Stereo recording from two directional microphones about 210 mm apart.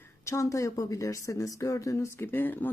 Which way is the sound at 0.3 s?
15° left (ahead or behind).